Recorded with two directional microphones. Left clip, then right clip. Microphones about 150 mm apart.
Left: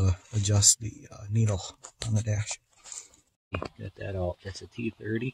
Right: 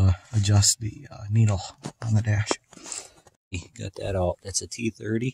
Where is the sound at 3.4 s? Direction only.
15° right (ahead or behind).